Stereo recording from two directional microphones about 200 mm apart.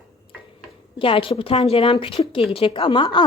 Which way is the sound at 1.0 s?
25° left (ahead or behind).